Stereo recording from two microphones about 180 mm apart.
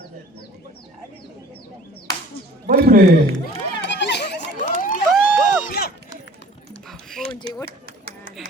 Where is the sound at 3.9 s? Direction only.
70° left (ahead or behind).